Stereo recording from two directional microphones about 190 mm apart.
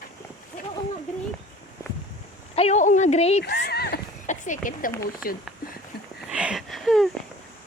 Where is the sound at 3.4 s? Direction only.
65° left (ahead or behind); by 4.9 s 45° left (ahead or behind).